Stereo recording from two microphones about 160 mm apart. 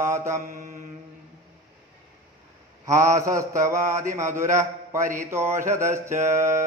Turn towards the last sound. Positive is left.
turn(degrees=-15)  # may be behind; listen again after turning